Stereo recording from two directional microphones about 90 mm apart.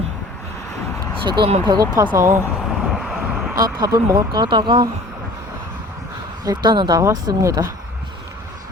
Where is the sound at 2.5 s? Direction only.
5° right (ahead or behind).